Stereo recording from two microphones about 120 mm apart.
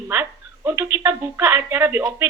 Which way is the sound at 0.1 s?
20° right (ahead or behind).